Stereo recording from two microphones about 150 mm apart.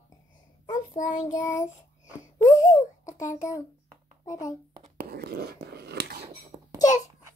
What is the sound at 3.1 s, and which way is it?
Speech, 55° left (ahead or behind).